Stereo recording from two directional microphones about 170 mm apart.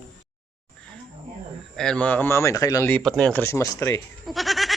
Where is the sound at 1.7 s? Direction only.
5° left (ahead or behind).